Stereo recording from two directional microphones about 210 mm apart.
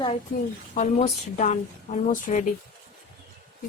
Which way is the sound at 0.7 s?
35° left (ahead or behind).